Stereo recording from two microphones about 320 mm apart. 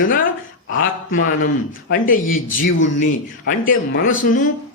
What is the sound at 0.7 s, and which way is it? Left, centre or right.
Speech, left.